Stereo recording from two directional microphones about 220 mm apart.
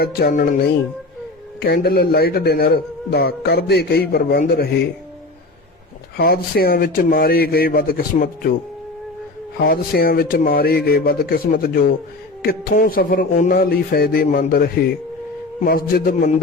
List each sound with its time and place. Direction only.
0.0 s speech: 45° left (ahead or behind)
6.1 s speech: 45° left (ahead or behind)
9.6 s speech: 45° left (ahead or behind)